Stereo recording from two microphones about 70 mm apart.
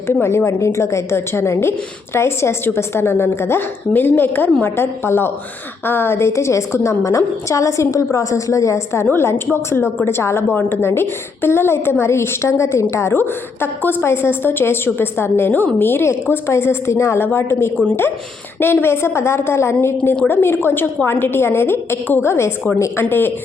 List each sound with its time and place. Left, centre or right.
0.1 s a woman's voice: left